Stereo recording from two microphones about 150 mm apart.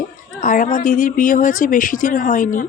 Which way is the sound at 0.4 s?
60° left (ahead or behind).